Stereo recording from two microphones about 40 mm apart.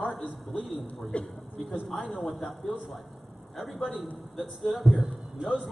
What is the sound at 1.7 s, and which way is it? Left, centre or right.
A man's voice, centre.